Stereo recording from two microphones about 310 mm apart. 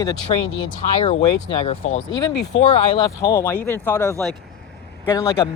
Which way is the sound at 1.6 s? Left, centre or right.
Centre.